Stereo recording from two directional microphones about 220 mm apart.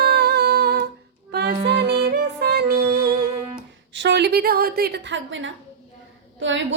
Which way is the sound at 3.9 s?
55° right (ahead or behind).